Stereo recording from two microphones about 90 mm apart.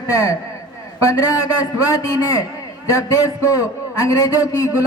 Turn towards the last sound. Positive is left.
turn(degrees=40)  # may be behind; listen again after turning